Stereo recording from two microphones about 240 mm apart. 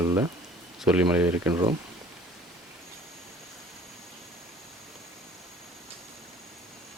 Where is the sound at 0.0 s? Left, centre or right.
Centre.